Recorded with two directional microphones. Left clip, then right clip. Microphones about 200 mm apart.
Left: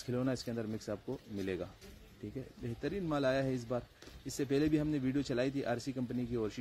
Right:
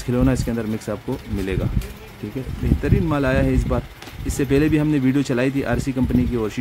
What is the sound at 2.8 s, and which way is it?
Speech, 10° left (ahead or behind).